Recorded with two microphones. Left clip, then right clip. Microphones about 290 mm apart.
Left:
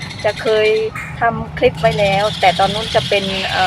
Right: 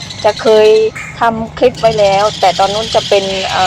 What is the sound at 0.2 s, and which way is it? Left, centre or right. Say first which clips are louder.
Speech: right 7 dB; centre.